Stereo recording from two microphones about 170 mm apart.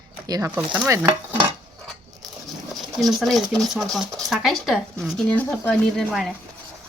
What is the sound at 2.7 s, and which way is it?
Speech, centre (ahead or behind).